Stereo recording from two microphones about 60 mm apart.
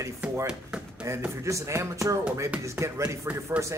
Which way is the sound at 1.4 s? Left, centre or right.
Right.